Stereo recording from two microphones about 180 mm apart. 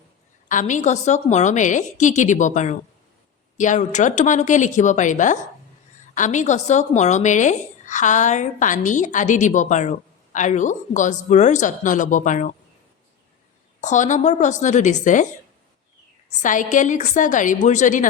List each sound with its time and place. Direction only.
0.4 s speech: 45° left (ahead or behind)
13.8 s speech: 45° left (ahead or behind)
16.3 s speech: 45° left (ahead or behind)